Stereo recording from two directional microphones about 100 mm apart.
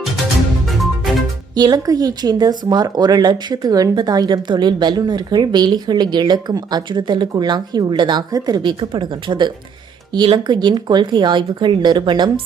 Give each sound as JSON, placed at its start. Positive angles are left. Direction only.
{"t": 1.5, "sound": "speech", "side_deg": -40}